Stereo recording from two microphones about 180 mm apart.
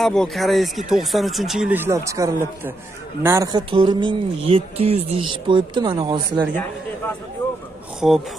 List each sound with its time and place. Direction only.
0.0 s speech: centre (ahead or behind); by 3.6 s 15° right (ahead or behind)
3.7 s speech: 25° right (ahead or behind)
8.0 s speech: centre (ahead or behind)